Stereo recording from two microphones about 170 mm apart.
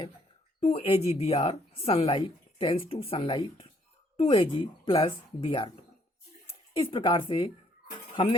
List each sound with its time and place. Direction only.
0.6 s a woman's voice: 35° left (ahead or behind)
6.7 s a woman's voice: 30° left (ahead or behind)